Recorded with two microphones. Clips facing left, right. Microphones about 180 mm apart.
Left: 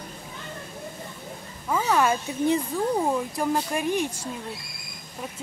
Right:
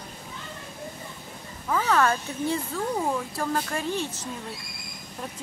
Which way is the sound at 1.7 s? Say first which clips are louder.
Left 1 dB; 15° left (ahead or behind).